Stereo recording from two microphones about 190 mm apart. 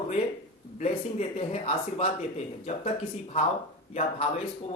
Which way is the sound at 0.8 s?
35° left (ahead or behind).